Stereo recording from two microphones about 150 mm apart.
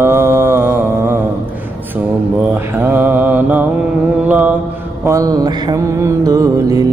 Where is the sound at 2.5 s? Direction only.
10° right (ahead or behind).